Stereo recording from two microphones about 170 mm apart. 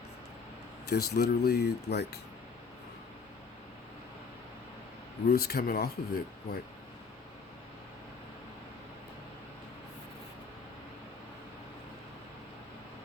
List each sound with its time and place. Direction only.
0.9 s speech: 70° left (ahead or behind)
5.3 s speech: 65° left (ahead or behind)